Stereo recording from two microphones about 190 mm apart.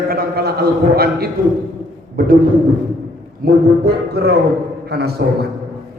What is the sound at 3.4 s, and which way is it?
A man's voice, 60° right (ahead or behind).